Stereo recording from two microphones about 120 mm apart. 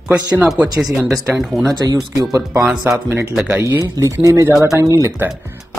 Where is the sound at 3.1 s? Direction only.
20° right (ahead or behind).